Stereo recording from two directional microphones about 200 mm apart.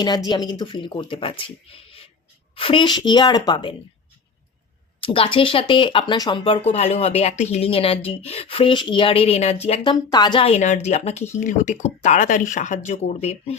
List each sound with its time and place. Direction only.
0.3 s speech: 20° left (ahead or behind)
4.9 s speech: 25° left (ahead or behind)